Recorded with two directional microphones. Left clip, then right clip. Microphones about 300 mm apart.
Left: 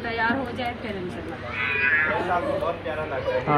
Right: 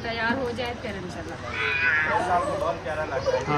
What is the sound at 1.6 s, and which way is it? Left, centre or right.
Speech, centre.